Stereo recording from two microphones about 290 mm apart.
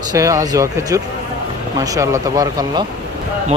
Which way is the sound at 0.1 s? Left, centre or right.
Centre.